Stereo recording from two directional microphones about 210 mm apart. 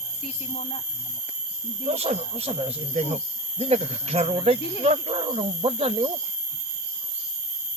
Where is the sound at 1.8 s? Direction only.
30° right (ahead or behind).